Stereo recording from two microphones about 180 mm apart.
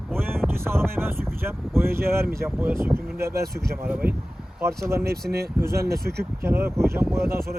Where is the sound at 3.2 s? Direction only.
60° right (ahead or behind).